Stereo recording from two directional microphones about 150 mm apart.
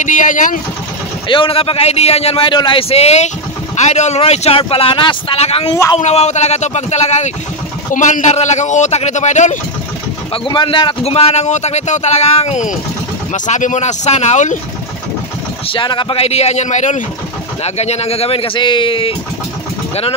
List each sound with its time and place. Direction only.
0.0 s speech: 60° left (ahead or behind)
1.3 s a man's voice: 35° left (ahead or behind); by 9.6 s 55° left (ahead or behind)
10.3 s a man's voice: 35° left (ahead or behind); by 14.6 s 50° left (ahead or behind)
15.7 s a man's voice: 35° left (ahead or behind)